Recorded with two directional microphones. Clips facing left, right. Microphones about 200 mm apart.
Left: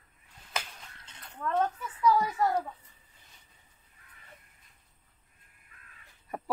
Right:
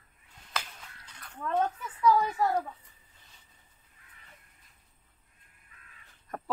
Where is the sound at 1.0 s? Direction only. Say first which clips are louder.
Even; 25° left (ahead or behind).